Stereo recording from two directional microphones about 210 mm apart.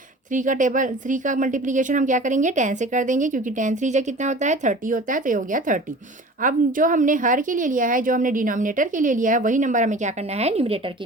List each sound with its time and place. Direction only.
0.3 s a woman's voice: 35° right (ahead or behind)